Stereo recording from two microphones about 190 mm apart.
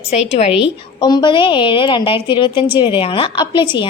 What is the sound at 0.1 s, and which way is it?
Speech, 35° left (ahead or behind).